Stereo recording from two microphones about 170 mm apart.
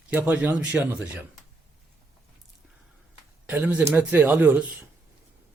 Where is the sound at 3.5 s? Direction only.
10° right (ahead or behind).